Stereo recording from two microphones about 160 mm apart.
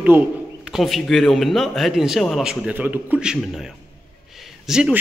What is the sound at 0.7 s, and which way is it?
A man's voice, centre (ahead or behind).